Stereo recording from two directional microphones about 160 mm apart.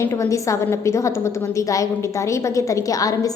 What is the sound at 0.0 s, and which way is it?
A woman's voice, 15° left (ahead or behind).